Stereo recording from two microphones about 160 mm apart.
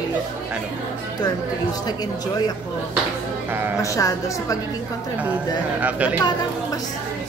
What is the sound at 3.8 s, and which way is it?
Speech, 20° left (ahead or behind).